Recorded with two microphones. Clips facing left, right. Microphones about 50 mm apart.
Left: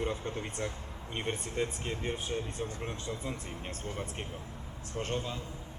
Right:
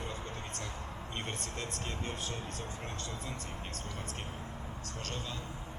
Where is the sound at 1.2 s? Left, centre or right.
Centre.